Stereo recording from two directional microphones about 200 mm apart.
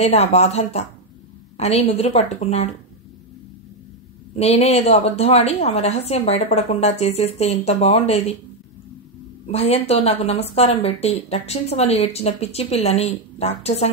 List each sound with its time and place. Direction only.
0.0 s a woman's voice: 30° left (ahead or behind)
4.4 s a woman's voice: 30° left (ahead or behind)
9.5 s a woman's voice: 30° left (ahead or behind)